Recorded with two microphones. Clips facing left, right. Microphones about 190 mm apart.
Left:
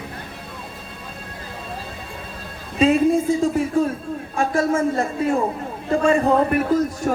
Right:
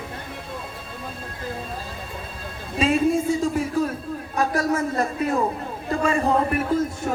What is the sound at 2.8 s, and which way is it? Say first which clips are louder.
A man's voice: left 4 dB; 35° left (ahead or behind).